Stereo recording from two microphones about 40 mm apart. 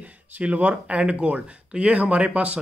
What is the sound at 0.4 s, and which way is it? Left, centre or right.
Speech, right.